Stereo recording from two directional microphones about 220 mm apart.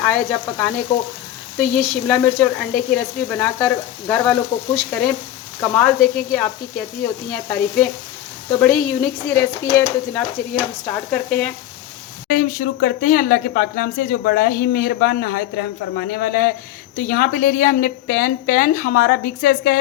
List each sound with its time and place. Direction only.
0.0 s speech: 5° left (ahead or behind)
6.3 s sizzle: 5° left (ahead or behind)
8.6 s speech: 10° left (ahead or behind)
12.3 s speech: 40° left (ahead or behind)